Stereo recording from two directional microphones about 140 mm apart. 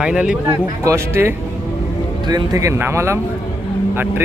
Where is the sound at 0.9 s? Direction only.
20° right (ahead or behind).